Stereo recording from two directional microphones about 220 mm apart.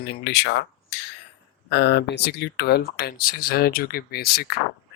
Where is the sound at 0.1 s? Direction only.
50° left (ahead or behind).